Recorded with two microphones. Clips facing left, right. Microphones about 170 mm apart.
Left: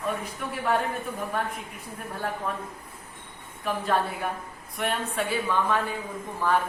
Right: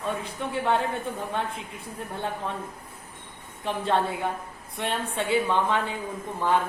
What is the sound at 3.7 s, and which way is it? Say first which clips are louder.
Speech: right 1 dB; 25° right (ahead or behind).